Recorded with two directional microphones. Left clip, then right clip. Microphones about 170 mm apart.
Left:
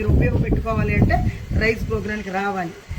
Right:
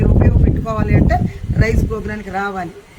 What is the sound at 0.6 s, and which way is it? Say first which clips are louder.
Speech: right 4 dB; 15° right (ahead or behind).